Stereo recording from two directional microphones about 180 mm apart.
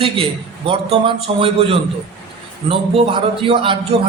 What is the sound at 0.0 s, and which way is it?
A man's voice, 30° right (ahead or behind).